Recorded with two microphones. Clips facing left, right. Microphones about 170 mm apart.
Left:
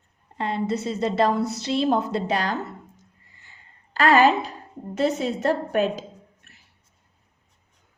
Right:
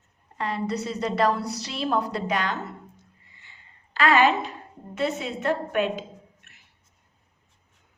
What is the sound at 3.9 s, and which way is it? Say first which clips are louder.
A woman's voice: left 3 dB; 40° left (ahead or behind).